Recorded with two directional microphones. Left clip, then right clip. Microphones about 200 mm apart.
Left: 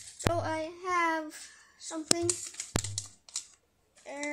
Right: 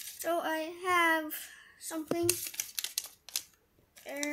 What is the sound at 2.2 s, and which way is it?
Crumpling, 25° right (ahead or behind).